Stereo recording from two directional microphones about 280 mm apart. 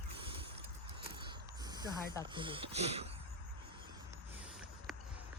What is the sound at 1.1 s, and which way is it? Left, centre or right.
Mechanisms, centre.